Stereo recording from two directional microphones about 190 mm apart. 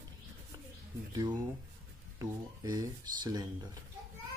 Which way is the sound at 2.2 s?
20° right (ahead or behind).